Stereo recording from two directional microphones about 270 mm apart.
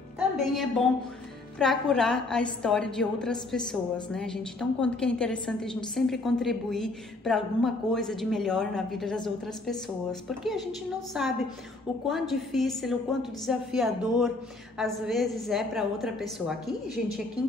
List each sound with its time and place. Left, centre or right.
0.5 s a woman's voice: centre
10.4 s a woman's voice: centre